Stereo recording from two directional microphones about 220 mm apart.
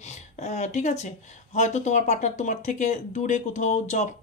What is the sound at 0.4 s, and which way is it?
Speech, 30° left (ahead or behind).